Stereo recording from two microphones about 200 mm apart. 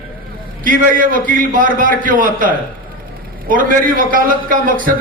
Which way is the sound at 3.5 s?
45° right (ahead or behind).